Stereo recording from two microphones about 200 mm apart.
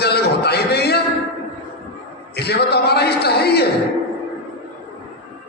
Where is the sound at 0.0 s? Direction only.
55° left (ahead or behind).